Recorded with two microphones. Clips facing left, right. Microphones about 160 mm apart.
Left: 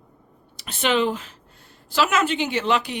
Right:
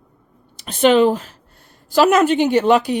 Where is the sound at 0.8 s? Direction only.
40° right (ahead or behind).